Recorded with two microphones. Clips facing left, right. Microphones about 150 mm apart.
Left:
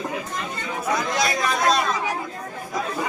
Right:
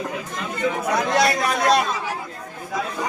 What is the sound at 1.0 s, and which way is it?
Speech, 65° right (ahead or behind).